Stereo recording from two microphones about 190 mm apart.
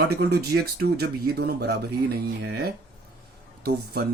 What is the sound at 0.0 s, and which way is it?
Speech, 60° right (ahead or behind).